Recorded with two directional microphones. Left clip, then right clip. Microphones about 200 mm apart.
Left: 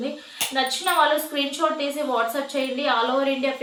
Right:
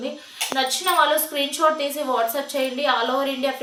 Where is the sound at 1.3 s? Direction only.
20° right (ahead or behind).